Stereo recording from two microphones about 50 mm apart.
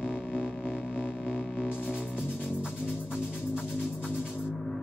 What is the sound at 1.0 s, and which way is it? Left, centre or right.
Music, left.